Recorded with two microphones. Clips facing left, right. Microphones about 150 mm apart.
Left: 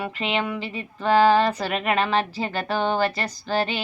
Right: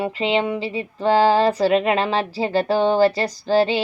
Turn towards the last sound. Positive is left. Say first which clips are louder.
# right 7 dB
turn(degrees=-30)  # may be behind; listen again after turning